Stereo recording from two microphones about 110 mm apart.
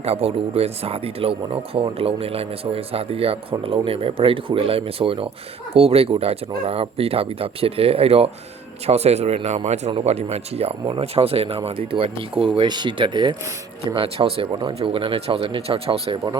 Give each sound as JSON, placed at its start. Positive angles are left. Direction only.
{"t": 0.0, "sound": "speech", "side_deg": -60}
{"t": 9.9, "sound": "speech", "side_deg": -70}
{"t": 13.9, "sound": "speech", "side_deg": -55}